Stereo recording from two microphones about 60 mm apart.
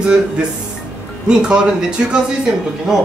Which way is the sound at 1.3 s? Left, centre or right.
Centre.